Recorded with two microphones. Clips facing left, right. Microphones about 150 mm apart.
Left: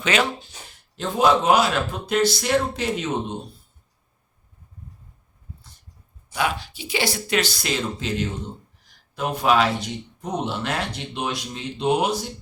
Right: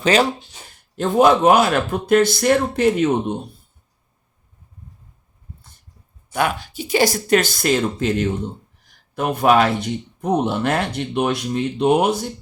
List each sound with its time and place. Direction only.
0.0 s speech: 35° right (ahead or behind)
0.9 s speech: 50° right (ahead or behind)
6.3 s speech: 50° right (ahead or behind)